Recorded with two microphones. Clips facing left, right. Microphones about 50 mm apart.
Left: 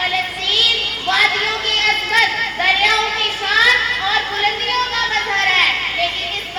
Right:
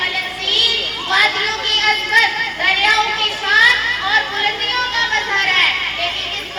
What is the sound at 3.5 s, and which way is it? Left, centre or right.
Children playing, right.